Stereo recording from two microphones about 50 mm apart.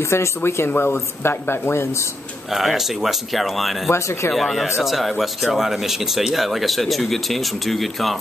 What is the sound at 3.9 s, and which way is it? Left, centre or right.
Speech, left.